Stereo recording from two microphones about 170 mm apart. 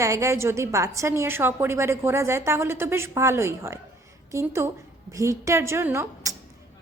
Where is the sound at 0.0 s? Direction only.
15° right (ahead or behind).